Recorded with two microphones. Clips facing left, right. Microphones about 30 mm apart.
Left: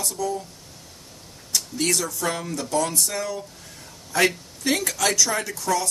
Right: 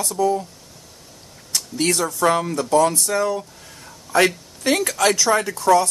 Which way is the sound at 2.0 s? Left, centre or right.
Right.